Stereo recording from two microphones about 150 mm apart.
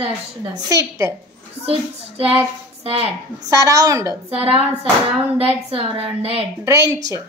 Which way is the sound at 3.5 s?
20° right (ahead or behind).